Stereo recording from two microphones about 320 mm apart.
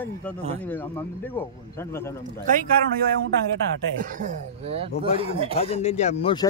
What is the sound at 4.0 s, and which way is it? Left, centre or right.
Speech, right.